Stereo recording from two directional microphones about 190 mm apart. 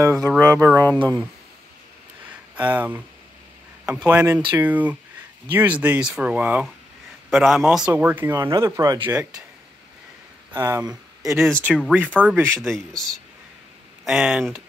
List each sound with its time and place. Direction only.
0.0 s speech: 10° right (ahead or behind)
0.9 s speech: 25° right (ahead or behind)
2.5 s speech: 10° right (ahead or behind)
10.5 s speech: 15° right (ahead or behind)
11.3 s speech: centre (ahead or behind)
12.5 s speech: centre (ahead or behind)